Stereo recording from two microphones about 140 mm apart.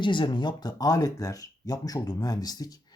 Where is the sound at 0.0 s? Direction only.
35° left (ahead or behind).